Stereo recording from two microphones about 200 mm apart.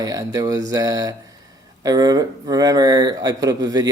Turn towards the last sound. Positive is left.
turn(degrees=-20)  # may be behind; listen again after turning